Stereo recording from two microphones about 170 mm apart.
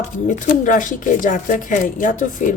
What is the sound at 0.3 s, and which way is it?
A woman's voice, 50° left (ahead or behind).